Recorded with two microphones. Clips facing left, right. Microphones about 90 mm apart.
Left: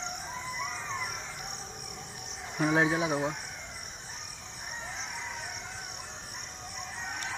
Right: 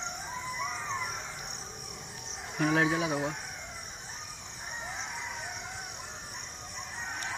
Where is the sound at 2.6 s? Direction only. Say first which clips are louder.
Left 1 dB; 25° left (ahead or behind).